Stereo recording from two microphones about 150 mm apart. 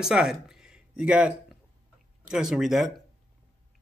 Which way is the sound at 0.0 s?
5° right (ahead or behind).